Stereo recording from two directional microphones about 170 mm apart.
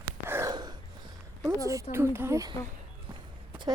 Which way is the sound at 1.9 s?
15° right (ahead or behind).